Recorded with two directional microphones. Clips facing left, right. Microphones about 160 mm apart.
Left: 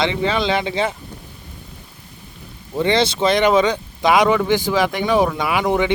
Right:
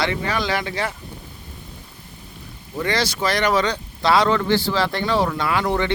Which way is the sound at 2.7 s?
25° left (ahead or behind).